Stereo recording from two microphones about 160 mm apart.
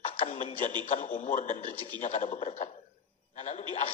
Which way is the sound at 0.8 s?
55° left (ahead or behind).